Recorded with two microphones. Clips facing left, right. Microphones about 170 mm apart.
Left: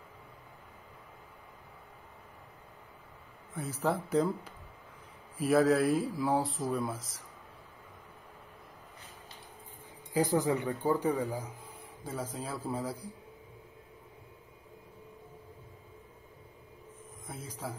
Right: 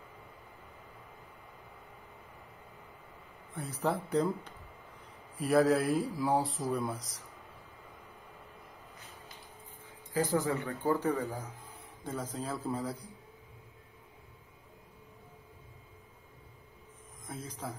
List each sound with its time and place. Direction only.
3.8 s speech: centre (ahead or behind)
10.1 s speech: 15° left (ahead or behind)
17.3 s speech: 10° left (ahead or behind)